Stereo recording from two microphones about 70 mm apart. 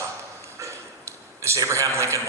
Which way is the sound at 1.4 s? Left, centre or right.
Right.